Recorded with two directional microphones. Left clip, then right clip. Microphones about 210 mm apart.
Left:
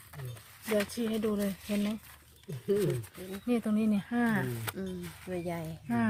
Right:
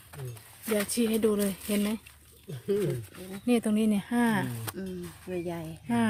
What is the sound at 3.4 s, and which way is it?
Speech, 30° right (ahead or behind).